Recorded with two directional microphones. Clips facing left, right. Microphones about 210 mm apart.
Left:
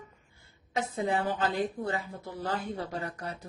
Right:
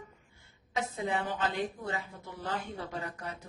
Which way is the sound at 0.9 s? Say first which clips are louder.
Left 5 dB; 40° left (ahead or behind).